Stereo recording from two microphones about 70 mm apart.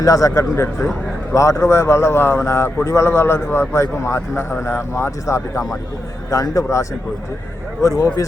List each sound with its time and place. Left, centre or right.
0.0 s a man's voice: left